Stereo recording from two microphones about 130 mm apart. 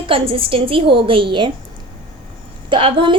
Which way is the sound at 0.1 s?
45° right (ahead or behind).